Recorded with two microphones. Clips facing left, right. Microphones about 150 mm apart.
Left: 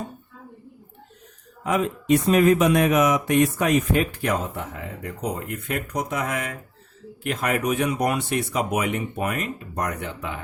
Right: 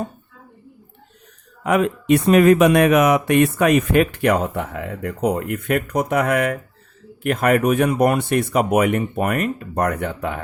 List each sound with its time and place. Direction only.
1.6 s speech: 65° right (ahead or behind)